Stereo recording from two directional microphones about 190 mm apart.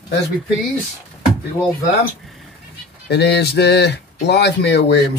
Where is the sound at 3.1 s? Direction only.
60° left (ahead or behind).